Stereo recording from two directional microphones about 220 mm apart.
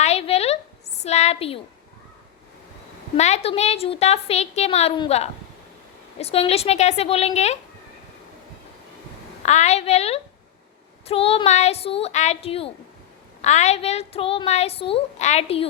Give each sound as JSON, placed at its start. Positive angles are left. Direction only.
{"t": 0.0, "sound": "a sound", "side_deg": 30}
{"t": 3.2, "sound": "a woman's voice", "side_deg": 30}
{"t": 9.4, "sound": "a woman's voice", "side_deg": 30}